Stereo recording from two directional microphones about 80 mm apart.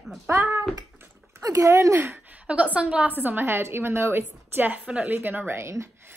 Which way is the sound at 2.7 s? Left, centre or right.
Centre.